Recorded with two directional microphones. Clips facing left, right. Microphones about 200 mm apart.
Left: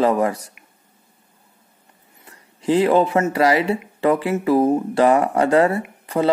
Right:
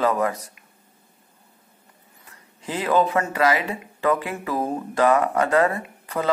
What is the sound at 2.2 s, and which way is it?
Speech, 35° left (ahead or behind).